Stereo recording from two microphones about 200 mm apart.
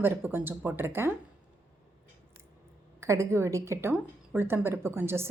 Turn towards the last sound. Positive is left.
turn(degrees=-10)  # may be behind; listen again after turning